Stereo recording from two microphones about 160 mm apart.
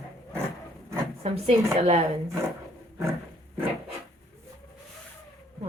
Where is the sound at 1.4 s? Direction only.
40° right (ahead or behind).